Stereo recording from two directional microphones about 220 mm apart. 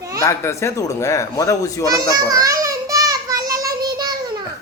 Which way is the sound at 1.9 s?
15° right (ahead or behind).